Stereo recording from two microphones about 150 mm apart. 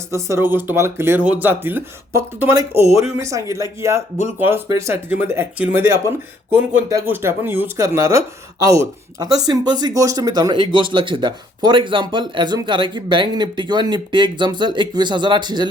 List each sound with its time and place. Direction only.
0.1 s speech: 15° right (ahead or behind)